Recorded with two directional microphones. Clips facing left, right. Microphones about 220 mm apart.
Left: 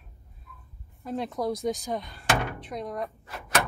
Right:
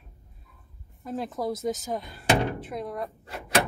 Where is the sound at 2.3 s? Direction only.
30° right (ahead or behind).